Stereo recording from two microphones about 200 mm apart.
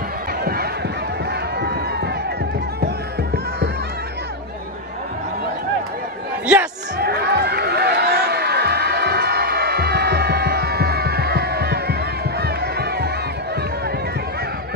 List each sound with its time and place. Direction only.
1.6 s run: 55° right (ahead or behind)
6.4 s a sound: 5° right (ahead or behind)
7.0 s crowd: 50° right (ahead or behind)